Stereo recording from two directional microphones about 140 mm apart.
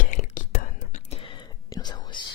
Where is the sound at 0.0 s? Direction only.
65° left (ahead or behind).